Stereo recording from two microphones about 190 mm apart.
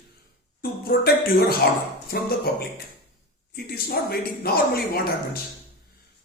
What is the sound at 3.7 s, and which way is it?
Speech, 55° left (ahead or behind).